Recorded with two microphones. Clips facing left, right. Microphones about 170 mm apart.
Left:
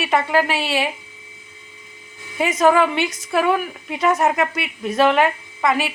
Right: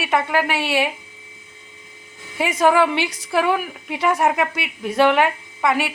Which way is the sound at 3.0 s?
15° right (ahead or behind).